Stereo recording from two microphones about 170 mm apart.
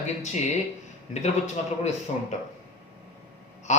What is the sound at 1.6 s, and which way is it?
Speech, 45° left (ahead or behind).